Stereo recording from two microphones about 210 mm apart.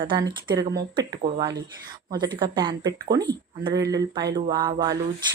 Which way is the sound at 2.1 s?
20° right (ahead or behind).